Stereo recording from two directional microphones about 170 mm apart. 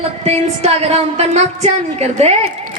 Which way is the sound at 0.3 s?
40° right (ahead or behind).